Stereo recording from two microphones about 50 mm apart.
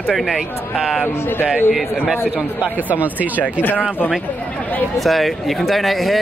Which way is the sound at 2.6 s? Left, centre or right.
Right.